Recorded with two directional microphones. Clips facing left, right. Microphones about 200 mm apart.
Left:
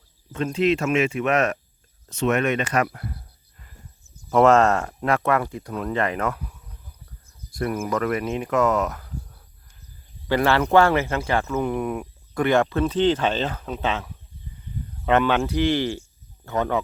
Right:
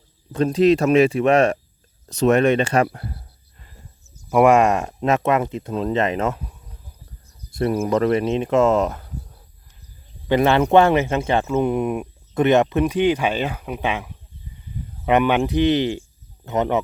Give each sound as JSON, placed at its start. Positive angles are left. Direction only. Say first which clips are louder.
{"t": 0.3, "sound": "speech", "louder": "right 6 dB", "side_deg": -35}
{"t": 4.3, "sound": "speech", "louder": "right 2 dB", "side_deg": -10}